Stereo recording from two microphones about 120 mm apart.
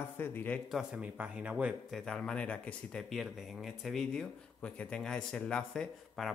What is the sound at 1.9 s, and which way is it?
Speech, 5° left (ahead or behind).